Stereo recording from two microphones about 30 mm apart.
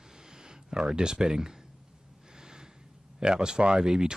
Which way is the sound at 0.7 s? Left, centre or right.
Right.